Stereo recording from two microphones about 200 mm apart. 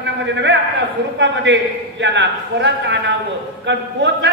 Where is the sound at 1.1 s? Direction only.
65° right (ahead or behind).